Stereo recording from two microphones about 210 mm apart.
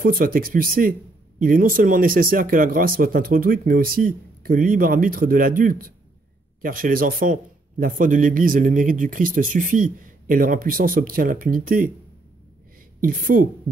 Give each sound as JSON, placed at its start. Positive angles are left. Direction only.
{"t": 0.0, "sound": "speech", "side_deg": -45}
{"t": 13.0, "sound": "speech", "side_deg": -40}